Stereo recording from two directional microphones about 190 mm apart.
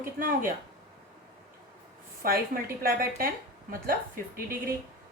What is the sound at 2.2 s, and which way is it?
A woman's voice, 50° right (ahead or behind).